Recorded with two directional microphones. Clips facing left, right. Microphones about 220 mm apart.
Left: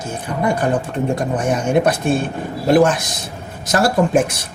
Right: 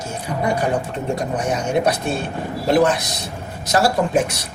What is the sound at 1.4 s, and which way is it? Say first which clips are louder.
Speech: left 4 dB; 50° left (ahead or behind).